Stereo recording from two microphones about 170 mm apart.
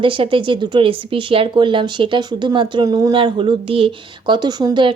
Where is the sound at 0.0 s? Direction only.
30° right (ahead or behind).